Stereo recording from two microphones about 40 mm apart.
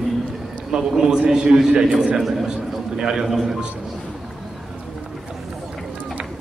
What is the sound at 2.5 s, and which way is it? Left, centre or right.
Speech, centre.